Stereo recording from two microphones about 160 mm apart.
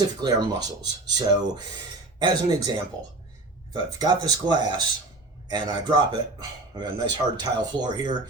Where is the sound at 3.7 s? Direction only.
25° right (ahead or behind).